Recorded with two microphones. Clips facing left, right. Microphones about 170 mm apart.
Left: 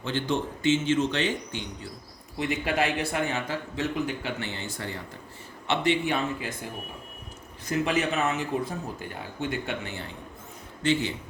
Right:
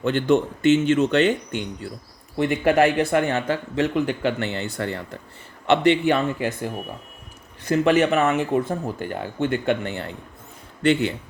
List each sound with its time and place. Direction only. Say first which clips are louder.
0.0 s speech: right 9 dB; 60° right (ahead or behind)